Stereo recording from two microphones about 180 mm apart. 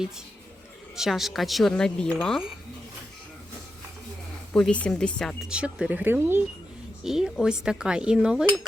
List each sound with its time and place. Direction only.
0.9 s speech: centre (ahead or behind)
4.5 s speech: 5° left (ahead or behind)